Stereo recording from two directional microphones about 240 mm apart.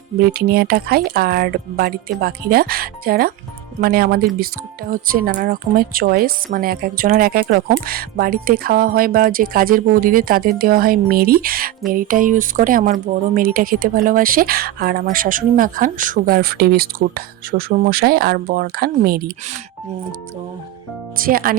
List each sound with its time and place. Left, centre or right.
0.2 s speech: right
21.2 s speech: right